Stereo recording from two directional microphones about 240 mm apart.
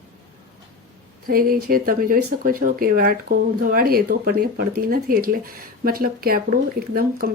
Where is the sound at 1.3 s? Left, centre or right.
Right.